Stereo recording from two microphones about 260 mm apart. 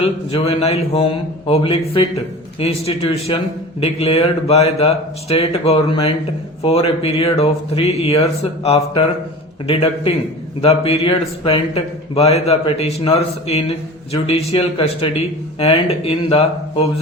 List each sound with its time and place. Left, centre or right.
0.0 s a man's voice: left